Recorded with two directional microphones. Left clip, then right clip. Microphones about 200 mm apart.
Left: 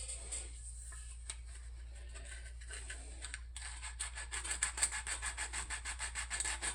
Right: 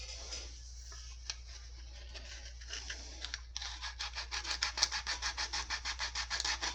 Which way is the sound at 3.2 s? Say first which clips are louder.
Right 8 dB; 25° right (ahead or behind).